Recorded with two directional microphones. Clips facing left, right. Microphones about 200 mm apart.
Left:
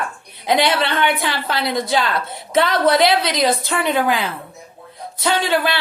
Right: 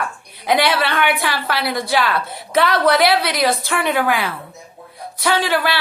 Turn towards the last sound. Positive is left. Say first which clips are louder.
# even
turn(degrees=25)  # may be behind; listen again after turning